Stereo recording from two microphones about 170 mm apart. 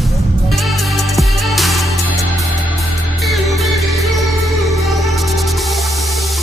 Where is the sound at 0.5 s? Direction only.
Centre (ahead or behind).